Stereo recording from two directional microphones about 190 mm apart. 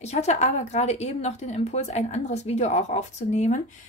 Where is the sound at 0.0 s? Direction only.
35° left (ahead or behind).